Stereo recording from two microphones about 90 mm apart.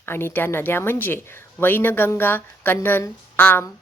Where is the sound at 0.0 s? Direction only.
25° left (ahead or behind).